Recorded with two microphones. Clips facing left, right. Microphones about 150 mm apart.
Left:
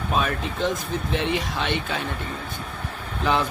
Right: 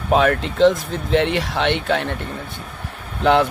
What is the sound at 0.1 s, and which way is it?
Speech, 70° right (ahead or behind).